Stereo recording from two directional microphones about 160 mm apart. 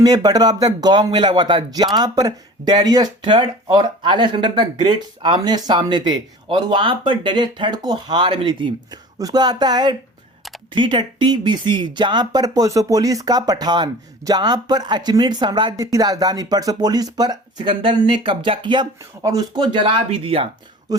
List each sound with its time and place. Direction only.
0.0 s speech: 25° right (ahead or behind)